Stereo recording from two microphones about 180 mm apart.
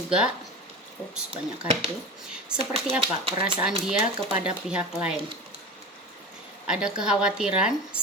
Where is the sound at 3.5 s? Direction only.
5° right (ahead or behind).